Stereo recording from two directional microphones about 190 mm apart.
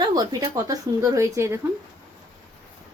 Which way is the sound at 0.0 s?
20° right (ahead or behind).